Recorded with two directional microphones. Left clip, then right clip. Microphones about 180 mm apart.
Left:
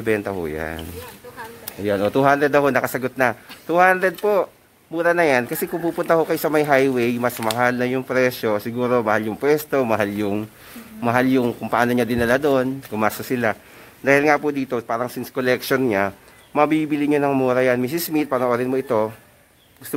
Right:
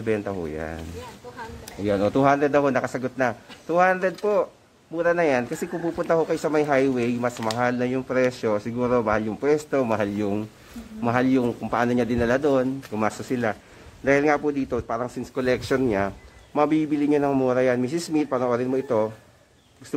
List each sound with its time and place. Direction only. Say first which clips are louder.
0.0 s speech: left 4 dB; 25° left (ahead or behind)
1.9 s speech: left 3 dB; 15° left (ahead or behind)